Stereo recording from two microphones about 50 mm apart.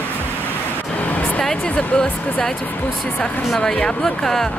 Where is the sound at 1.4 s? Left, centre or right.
Centre.